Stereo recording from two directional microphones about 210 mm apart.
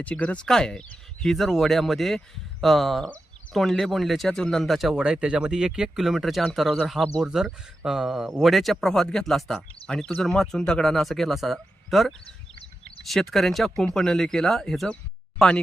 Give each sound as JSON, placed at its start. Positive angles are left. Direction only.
{"t": 0.0, "sound": "speech", "side_deg": 5}
{"t": 12.2, "sound": "a sound", "side_deg": 25}
{"t": 13.1, "sound": "speech", "side_deg": 0}